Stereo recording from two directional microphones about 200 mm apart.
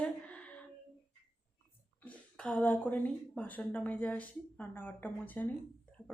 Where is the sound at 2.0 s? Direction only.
5° left (ahead or behind).